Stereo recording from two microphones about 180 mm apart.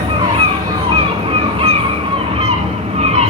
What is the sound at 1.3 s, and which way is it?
Crow, 30° right (ahead or behind).